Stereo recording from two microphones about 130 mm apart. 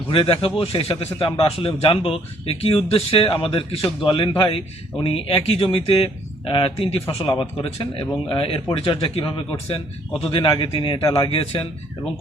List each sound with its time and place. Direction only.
0.1 s speech: 45° left (ahead or behind)
9.0 s speech: 45° left (ahead or behind)